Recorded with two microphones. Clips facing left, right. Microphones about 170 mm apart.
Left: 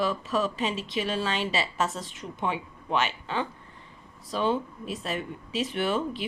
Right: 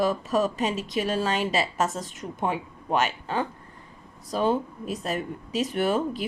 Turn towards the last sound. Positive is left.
turn(degrees=-45)  # may be behind; listen again after turning